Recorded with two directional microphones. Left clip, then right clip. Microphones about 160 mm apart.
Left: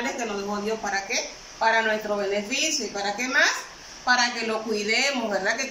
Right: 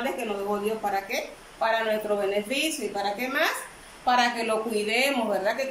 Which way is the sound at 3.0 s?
20° right (ahead or behind).